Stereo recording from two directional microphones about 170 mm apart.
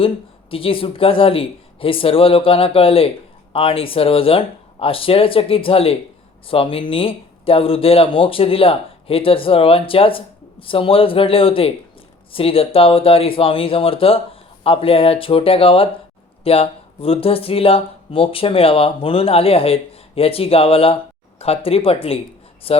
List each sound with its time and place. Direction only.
0.5 s speech: 30° left (ahead or behind)